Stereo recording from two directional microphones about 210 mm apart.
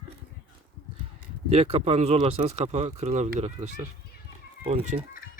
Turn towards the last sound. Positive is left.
turn(degrees=-30)  # may be behind; listen again after turning